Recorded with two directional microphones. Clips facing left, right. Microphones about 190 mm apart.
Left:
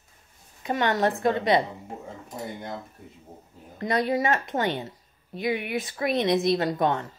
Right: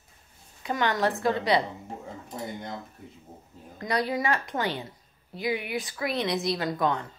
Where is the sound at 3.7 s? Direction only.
20° left (ahead or behind).